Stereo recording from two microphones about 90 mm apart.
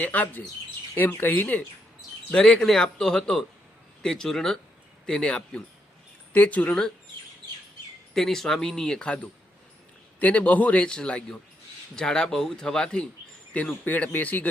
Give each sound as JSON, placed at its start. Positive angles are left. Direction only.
{"t": 0.0, "sound": "a man's voice", "side_deg": 15}
{"t": 2.3, "sound": "a man's voice", "side_deg": 10}
{"t": 8.1, "sound": "a man's voice", "side_deg": 5}